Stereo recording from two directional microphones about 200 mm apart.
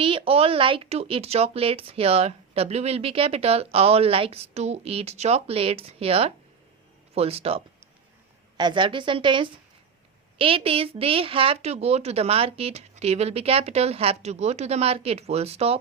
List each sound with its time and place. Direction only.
0.0 s a woman's voice: 25° right (ahead or behind)